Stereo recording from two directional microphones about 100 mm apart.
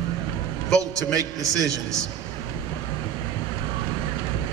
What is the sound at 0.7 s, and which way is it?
A man's voice, 35° right (ahead or behind).